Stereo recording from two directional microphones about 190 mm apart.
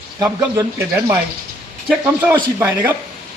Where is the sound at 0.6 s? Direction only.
15° right (ahead or behind).